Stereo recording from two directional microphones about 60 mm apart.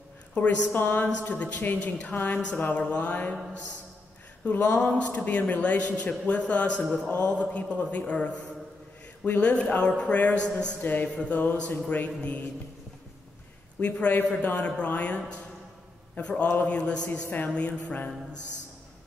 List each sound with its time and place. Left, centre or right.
0.3 s a woman's voice: left
0.7 s a man's voice: left
13.7 s a man's voice: left